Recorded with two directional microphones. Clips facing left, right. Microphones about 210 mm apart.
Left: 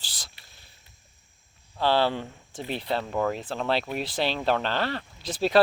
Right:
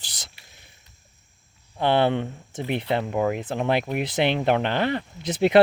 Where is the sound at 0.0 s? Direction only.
20° right (ahead or behind).